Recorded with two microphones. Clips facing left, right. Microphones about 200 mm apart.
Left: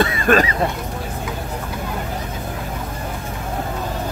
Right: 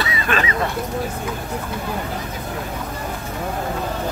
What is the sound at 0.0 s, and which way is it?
Speech, 50° left (ahead or behind).